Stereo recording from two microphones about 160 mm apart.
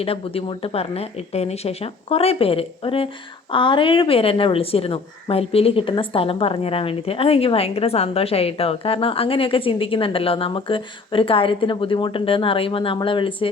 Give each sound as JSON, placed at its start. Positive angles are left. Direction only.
{"t": 0.0, "sound": "a woman's voice", "side_deg": 35}